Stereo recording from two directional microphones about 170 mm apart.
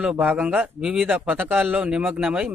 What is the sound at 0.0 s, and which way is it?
Speech, 5° right (ahead or behind).